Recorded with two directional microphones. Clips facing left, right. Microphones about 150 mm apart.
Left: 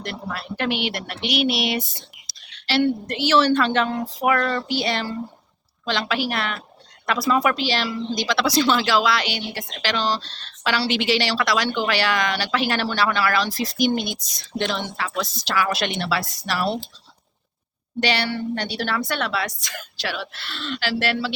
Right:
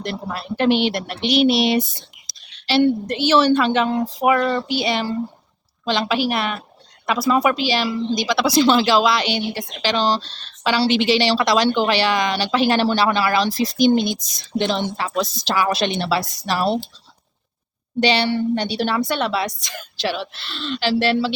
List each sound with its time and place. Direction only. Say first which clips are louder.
0.0 s a woman's voice: right 4 dB; 25° right (ahead or behind)
2.8 s a woman's voice: right 4 dB; 20° right (ahead or behind)
8.6 s a woman's voice: right 4 dB; 25° right (ahead or behind)
18.0 s a woman's voice: right 5 dB; 20° right (ahead or behind)